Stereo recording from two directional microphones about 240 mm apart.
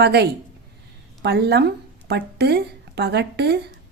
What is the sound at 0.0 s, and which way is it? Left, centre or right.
Speech, right.